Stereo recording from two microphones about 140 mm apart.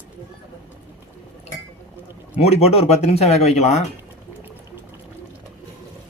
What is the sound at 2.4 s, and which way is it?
Speech, 50° left (ahead or behind).